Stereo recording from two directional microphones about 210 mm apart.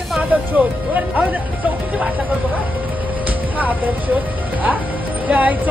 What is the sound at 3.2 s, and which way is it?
Music, 10° right (ahead or behind).